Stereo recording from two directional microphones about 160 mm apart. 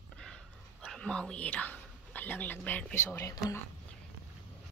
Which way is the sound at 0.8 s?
5° left (ahead or behind).